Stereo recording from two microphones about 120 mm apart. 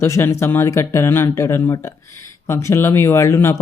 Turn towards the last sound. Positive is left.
turn(degrees=20)  # may be behind; listen again after turning